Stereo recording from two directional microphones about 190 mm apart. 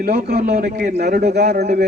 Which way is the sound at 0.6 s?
50° right (ahead or behind).